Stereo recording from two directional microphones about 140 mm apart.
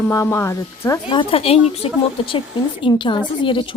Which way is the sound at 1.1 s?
40° left (ahead or behind).